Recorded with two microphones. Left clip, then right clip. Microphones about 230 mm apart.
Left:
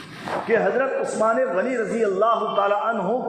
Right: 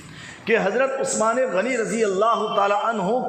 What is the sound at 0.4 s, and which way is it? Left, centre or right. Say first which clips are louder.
A man's voice: right 1 dB; right.